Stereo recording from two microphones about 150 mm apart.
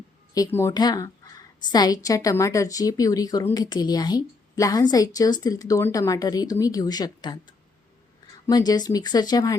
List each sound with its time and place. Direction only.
0.3 s a woman's voice: 20° left (ahead or behind)